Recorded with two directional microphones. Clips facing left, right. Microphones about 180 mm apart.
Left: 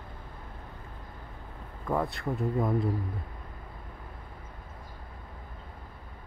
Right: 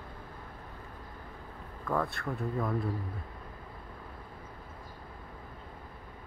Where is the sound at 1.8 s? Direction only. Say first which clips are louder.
Left 2 dB; 20° left (ahead or behind).